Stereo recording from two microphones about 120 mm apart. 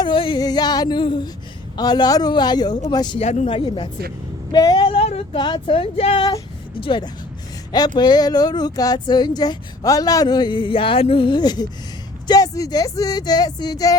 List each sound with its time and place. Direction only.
0.0 s speech: 45° left (ahead or behind)
0.3 s speech: 35° left (ahead or behind)
3.2 s speech: 75° left (ahead or behind)
3.5 s speech: 45° left (ahead or behind)
4.5 s female singing: 35° left (ahead or behind); by 5.4 s 55° left (ahead or behind)
5.4 s speech: 40° left (ahead or behind)